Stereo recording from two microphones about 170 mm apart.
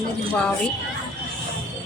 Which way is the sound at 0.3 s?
5° left (ahead or behind).